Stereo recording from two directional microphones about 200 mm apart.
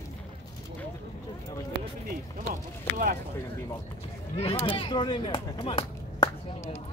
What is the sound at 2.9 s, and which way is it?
Speech, 45° right (ahead or behind).